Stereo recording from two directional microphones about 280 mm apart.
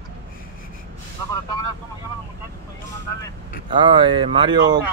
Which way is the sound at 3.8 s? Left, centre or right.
Centre.